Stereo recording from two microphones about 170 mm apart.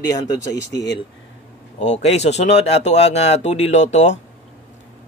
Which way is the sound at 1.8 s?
40° left (ahead or behind).